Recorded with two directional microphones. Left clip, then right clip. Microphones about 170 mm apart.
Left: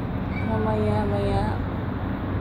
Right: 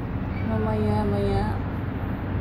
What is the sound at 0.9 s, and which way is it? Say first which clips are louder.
Speech: left 1 dB; 30° right (ahead or behind).